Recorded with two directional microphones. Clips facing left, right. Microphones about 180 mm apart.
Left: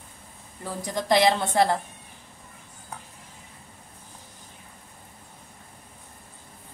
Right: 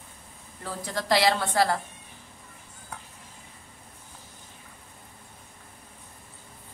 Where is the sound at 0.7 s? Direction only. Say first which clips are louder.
Left 2 dB; 15° left (ahead or behind).